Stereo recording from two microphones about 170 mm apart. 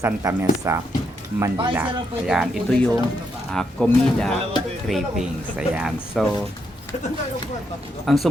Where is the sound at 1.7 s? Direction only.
5° right (ahead or behind).